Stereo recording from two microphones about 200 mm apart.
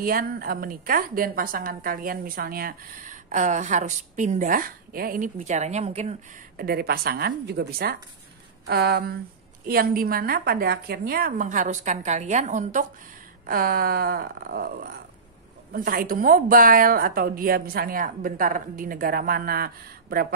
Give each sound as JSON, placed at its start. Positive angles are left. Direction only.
{"t": 0.0, "sound": "a woman's voice", "side_deg": -45}
{"t": 6.5, "sound": "a woman's voice", "side_deg": -50}